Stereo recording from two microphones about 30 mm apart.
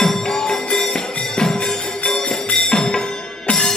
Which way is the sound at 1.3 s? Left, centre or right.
Left.